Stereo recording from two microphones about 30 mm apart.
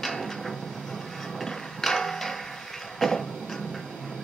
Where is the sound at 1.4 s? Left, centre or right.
Centre.